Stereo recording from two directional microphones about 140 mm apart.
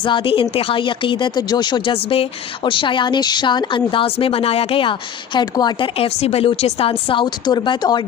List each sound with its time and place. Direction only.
0.0 s speech: 35° left (ahead or behind)
6.0 s speech: 45° left (ahead or behind); by 8.0 s 30° left (ahead or behind)